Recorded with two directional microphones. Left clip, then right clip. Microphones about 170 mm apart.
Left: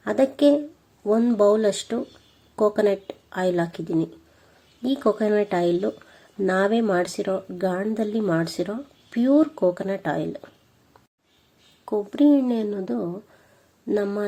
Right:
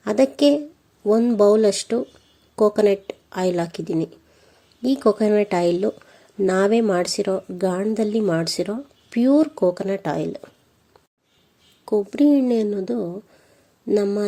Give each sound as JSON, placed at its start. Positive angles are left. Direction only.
{"t": 0.0, "sound": "speech", "side_deg": -35}
{"t": 11.9, "sound": "speech", "side_deg": -35}